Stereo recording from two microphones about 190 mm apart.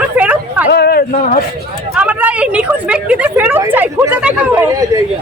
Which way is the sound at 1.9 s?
5° right (ahead or behind).